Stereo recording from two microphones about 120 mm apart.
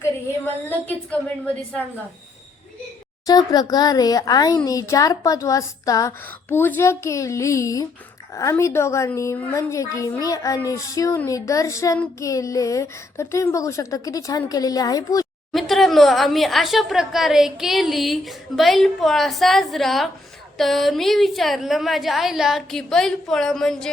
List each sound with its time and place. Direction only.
0.0 s a woman's voice: 15° left (ahead or behind)
3.2 s speech: 30° left (ahead or behind)
15.5 s a woman's voice: centre (ahead or behind)